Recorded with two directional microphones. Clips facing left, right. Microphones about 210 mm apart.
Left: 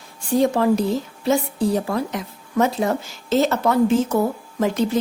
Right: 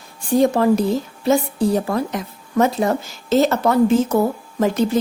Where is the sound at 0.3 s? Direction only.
45° right (ahead or behind).